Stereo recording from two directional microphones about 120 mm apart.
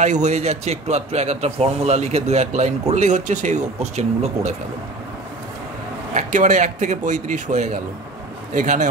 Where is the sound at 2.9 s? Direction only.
80° right.